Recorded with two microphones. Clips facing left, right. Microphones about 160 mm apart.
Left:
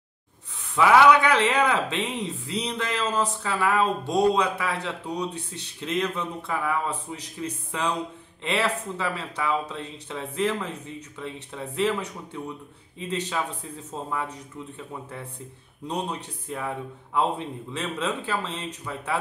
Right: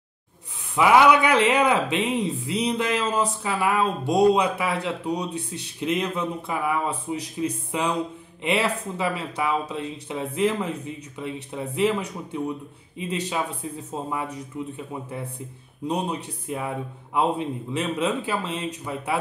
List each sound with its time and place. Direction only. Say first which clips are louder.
0.7 s speech: even; 15° right (ahead or behind)